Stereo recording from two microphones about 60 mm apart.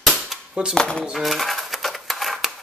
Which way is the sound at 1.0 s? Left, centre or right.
Centre.